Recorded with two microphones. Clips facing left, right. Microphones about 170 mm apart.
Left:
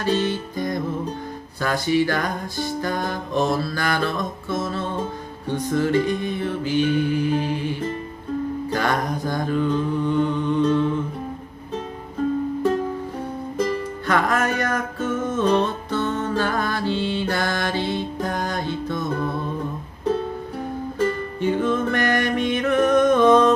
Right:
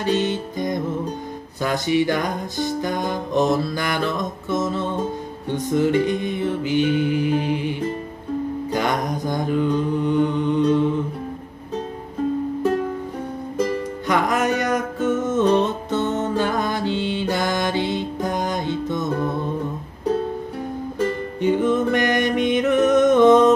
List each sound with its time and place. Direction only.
0.0 s music: 20° right (ahead or behind)
8.6 s mantra: 15° right (ahead or behind)
13.6 s music: 15° right (ahead or behind)
21.4 s music: 15° right (ahead or behind)